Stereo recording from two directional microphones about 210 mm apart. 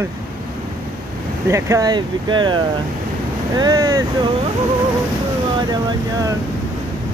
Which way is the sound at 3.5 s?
20° right (ahead or behind).